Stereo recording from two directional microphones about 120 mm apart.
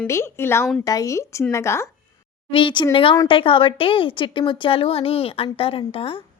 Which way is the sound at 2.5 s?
45° left (ahead or behind).